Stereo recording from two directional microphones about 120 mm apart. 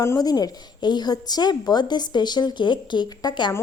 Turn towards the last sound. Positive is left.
turn(degrees=40)  # may be behind; listen again after turning